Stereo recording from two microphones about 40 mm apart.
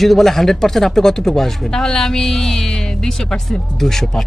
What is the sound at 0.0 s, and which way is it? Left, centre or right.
Speech, centre.